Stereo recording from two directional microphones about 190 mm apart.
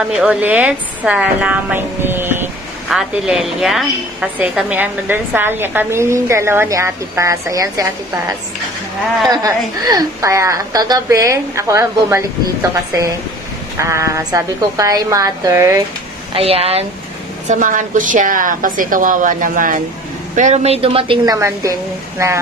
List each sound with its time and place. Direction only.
0.1 s a woman's voice: 5° right (ahead or behind)
9.3 s a woman's voice: 20° right (ahead or behind)
13.7 s a woman's voice: 15° right (ahead or behind)
16.3 s speech: 30° right (ahead or behind)
17.5 s a woman's voice: 40° right (ahead or behind)
21.4 s a woman's voice: 15° right (ahead or behind)